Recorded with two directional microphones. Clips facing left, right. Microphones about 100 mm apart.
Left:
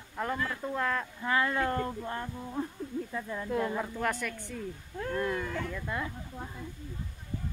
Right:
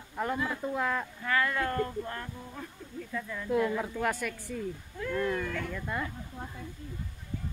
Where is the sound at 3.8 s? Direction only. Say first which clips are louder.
Right 1 dB; centre (ahead or behind).